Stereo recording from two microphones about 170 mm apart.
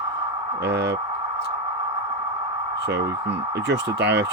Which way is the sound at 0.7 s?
80° right.